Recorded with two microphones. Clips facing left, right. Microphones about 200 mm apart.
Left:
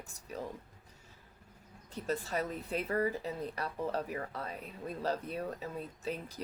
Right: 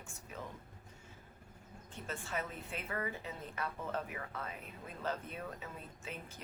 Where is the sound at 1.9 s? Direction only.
40° left (ahead or behind).